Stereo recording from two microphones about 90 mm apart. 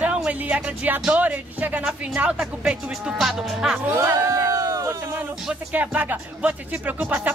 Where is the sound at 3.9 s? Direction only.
35° right (ahead or behind).